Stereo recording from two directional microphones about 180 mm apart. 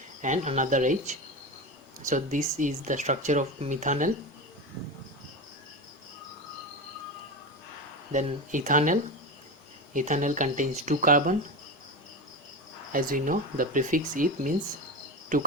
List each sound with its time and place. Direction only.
0.2 s speech: 40° right (ahead or behind)
8.1 s speech: 45° right (ahead or behind)
12.9 s speech: 50° right (ahead or behind)